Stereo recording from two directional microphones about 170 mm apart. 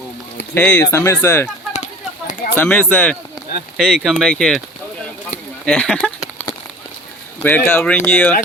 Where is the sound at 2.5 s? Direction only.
10° left (ahead or behind).